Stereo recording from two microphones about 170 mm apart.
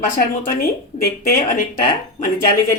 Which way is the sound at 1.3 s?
60° left (ahead or behind).